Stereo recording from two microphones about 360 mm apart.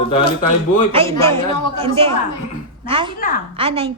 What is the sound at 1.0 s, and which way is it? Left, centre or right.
Speech, centre.